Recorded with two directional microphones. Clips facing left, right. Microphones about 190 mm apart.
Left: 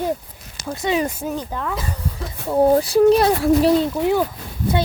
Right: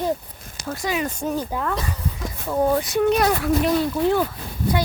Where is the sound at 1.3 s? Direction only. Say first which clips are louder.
Right 1 dB; 5° right (ahead or behind).